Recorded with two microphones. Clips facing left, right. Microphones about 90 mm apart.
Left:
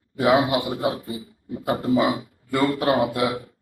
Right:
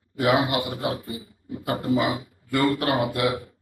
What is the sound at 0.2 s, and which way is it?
Speech, 25° left (ahead or behind).